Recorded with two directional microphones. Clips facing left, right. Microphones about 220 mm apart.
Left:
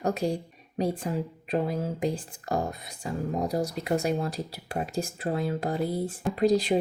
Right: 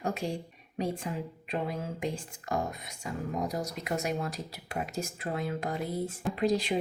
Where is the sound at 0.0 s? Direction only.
40° left (ahead or behind).